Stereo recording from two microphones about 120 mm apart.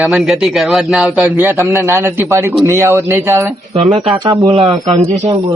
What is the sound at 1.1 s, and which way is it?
Speech, 15° right (ahead or behind).